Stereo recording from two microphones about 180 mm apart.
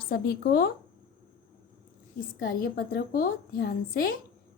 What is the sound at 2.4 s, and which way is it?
A woman's voice, 55° left (ahead or behind).